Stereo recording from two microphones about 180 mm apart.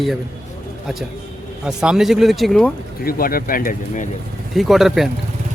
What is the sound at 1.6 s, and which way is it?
A man's voice, 5° right (ahead or behind).